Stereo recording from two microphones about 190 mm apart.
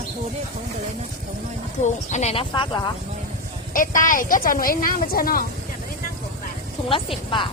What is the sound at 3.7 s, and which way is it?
A woman's voice, 45° left (ahead or behind).